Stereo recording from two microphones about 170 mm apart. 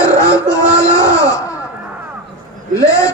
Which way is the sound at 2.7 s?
20° left (ahead or behind).